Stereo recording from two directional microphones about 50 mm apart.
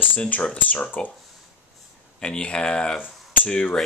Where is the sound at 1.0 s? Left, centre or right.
Centre.